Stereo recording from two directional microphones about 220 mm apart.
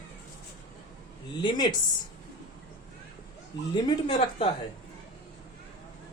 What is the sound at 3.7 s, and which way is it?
Speech, 20° left (ahead or behind).